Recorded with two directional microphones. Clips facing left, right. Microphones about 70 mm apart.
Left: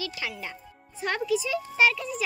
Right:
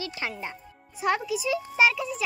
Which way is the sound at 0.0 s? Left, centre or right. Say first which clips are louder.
Right 1 dB; right.